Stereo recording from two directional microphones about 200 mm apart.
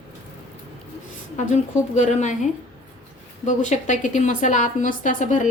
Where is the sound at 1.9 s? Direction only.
35° left (ahead or behind).